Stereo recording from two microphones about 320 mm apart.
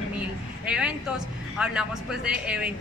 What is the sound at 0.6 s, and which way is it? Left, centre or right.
Speech, centre.